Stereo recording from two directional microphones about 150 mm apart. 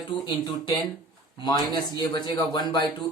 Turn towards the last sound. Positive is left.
turn(degrees=30)  # may be behind; listen again after turning